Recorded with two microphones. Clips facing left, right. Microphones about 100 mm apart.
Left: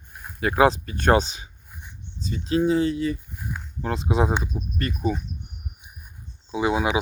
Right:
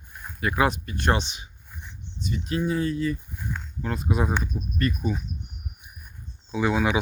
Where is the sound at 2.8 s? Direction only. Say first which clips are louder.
Left 2 dB; 70° left (ahead or behind).